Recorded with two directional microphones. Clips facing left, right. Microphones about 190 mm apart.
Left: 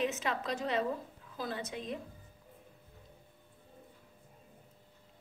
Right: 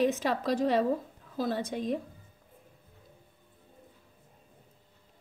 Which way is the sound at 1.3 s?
40° right (ahead or behind).